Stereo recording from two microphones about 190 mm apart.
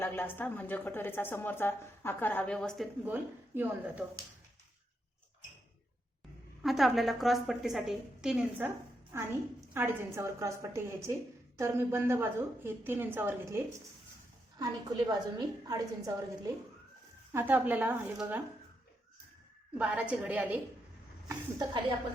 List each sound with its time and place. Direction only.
0.0 s a woman's voice: 10° left (ahead or behind)
3.0 s a woman's voice: 10° right (ahead or behind)
6.6 s a woman's voice: centre (ahead or behind)
14.6 s a woman's voice: 20° right (ahead or behind)
19.7 s a woman's voice: 5° right (ahead or behind)
21.2 s a woman's voice: 25° right (ahead or behind)